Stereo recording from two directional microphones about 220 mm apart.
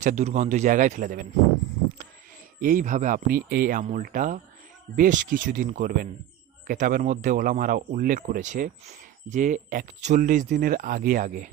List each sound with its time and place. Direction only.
0.0 s speech: 35° right (ahead or behind)
2.6 s speech: 35° right (ahead or behind)